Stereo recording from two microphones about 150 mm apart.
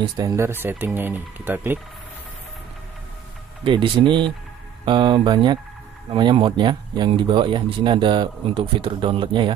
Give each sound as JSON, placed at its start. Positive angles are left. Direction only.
{"t": 0.0, "sound": "speech", "side_deg": -25}
{"t": 3.6, "sound": "speech", "side_deg": -35}